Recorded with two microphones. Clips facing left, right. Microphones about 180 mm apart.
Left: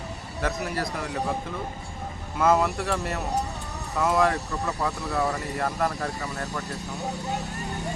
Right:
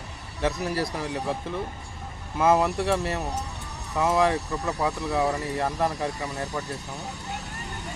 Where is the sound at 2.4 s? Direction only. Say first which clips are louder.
Right 1 dB; 25° right (ahead or behind).